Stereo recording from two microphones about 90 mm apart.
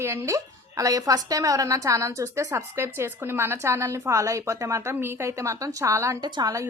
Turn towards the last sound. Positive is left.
turn(degrees=-55)  # may be behind; listen again after turning